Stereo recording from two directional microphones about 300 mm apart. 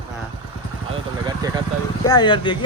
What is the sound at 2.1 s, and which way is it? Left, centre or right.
Speech, centre.